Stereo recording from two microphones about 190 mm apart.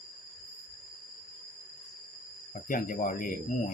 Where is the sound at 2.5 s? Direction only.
45° left (ahead or behind).